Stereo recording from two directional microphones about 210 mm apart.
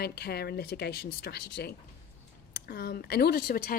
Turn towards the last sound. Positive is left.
turn(degrees=45)  # may be behind; listen again after turning